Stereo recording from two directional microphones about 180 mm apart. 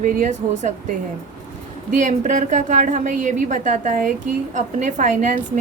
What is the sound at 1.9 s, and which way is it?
A woman's voice, 45° right (ahead or behind).